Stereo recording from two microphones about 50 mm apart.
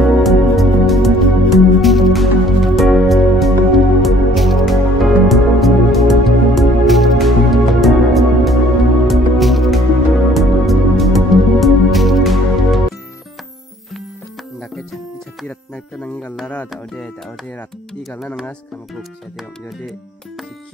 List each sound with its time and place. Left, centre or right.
0.2 s music: centre
15.4 s music: left